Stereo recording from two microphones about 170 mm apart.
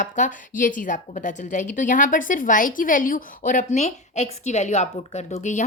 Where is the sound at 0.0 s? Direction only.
50° left (ahead or behind).